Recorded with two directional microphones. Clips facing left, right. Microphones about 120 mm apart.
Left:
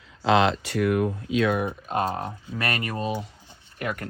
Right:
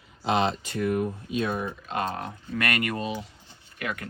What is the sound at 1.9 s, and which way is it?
Speech, 45° left (ahead or behind).